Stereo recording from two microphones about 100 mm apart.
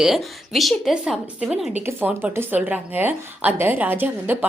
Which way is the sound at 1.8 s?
20° right (ahead or behind).